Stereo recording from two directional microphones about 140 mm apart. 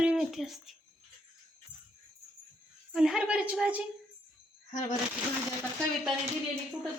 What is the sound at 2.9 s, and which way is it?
Speech, 5° right (ahead or behind).